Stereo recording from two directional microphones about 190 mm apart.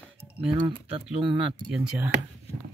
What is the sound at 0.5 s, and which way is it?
Speech, 25° right (ahead or behind).